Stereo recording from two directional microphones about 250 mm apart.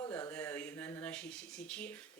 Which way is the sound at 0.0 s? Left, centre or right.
Centre.